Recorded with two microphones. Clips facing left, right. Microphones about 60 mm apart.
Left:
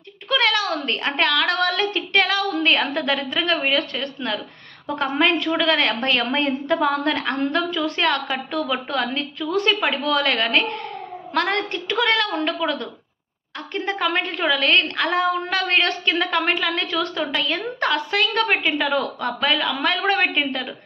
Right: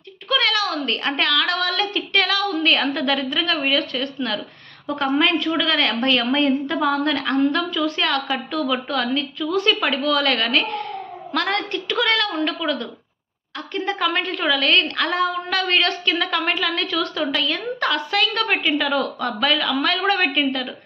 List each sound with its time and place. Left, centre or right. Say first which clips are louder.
0.3 s a woman's voice: left 1 dB; left